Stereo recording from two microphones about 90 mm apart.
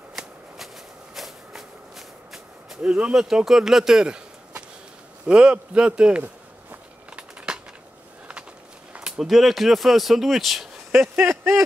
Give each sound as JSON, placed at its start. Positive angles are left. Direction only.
{"t": 0.1, "sound": "shuffling cards", "side_deg": -5}
{"t": 1.1, "sound": "walk", "side_deg": 0}
{"t": 8.9, "sound": "speech", "side_deg": -10}
{"t": 11.1, "sound": "speech", "side_deg": -25}